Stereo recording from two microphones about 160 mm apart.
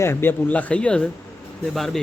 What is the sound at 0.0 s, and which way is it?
Speech, 15° left (ahead or behind).